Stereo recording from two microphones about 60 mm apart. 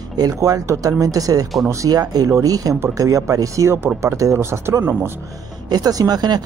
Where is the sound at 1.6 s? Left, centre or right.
Right.